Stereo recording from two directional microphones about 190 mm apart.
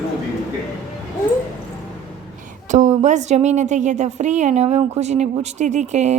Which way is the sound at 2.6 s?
40° right (ahead or behind).